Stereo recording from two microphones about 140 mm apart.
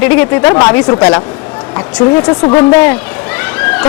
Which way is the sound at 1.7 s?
10° left (ahead or behind).